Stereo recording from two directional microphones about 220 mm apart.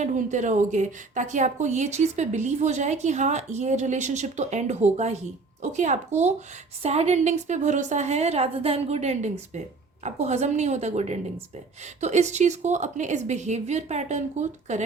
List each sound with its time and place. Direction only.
0.0 s a woman's voice: 35° right (ahead or behind)